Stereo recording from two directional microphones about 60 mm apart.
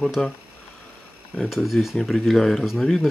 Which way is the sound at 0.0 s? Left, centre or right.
Centre.